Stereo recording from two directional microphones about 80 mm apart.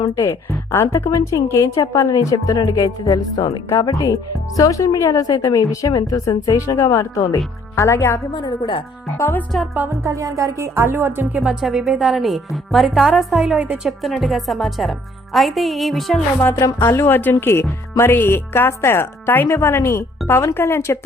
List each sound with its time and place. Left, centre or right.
0.3 s a woman's voice: left
3.5 s speech: left
3.8 s a woman's voice: left
7.8 s speech: left
8.4 s speech: left
9.5 s a woman's voice: centre
9.9 s speech: right
10.8 s speech: right
11.6 s a woman's voice: centre
16.8 s speech: left